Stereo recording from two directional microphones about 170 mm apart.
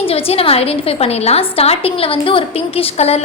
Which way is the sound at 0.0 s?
35° left (ahead or behind).